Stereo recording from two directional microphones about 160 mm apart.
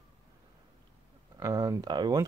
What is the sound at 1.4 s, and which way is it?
Speech, 20° right (ahead or behind).